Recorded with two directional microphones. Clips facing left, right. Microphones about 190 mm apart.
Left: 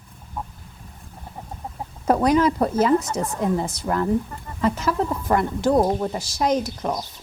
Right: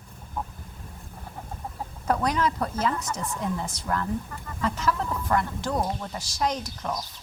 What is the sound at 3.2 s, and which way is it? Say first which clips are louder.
Speech: left 7 dB; 50° left (ahead or behind).